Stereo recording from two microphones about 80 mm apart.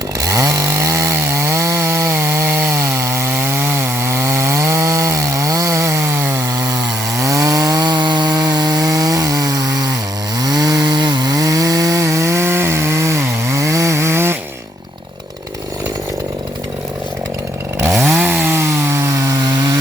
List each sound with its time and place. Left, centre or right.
0.2 s chainsaw: right
2.7 s chainsaw: right
7.2 s chainsaw: right
18.0 s chainsaw: right